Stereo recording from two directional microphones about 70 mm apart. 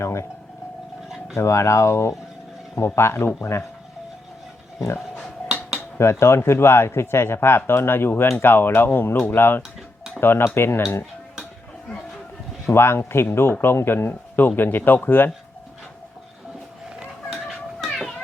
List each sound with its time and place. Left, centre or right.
0.0 s speech: left
1.4 s speech: left
4.9 s a sound: centre
6.0 s speech: left
12.6 s speech: left
17.2 s children playing: centre